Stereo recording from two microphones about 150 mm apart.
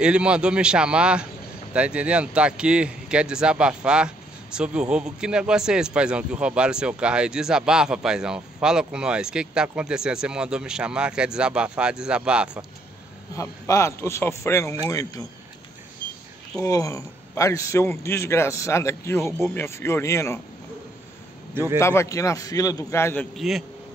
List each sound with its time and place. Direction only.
0.0 s a man's voice: 5° right (ahead or behind)
13.4 s a man's voice: 20° left (ahead or behind)
16.5 s a man's voice: 20° left (ahead or behind)
21.7 s a man's voice: 20° left (ahead or behind)
23.3 s a man's voice: centre (ahead or behind)